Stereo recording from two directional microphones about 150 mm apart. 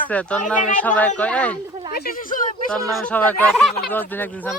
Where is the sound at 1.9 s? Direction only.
80° left.